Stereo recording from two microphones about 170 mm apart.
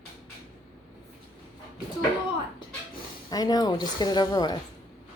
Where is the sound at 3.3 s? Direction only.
20° left (ahead or behind).